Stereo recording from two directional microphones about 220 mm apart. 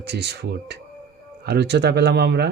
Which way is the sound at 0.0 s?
50° right (ahead or behind).